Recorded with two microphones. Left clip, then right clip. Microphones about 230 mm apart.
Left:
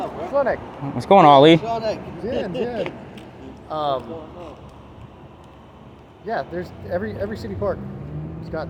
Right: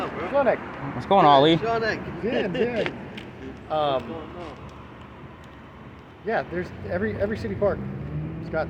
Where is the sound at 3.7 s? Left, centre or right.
Centre.